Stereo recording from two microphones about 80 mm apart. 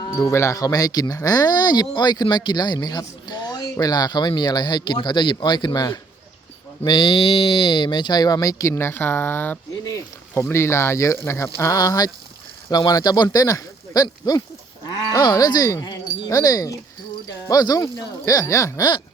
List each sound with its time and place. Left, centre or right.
0.0 s speech: left
6.8 s speech: left
9.8 s a sound: left
10.4 s speech: left
11.6 s speech: left
18.8 s a sound: left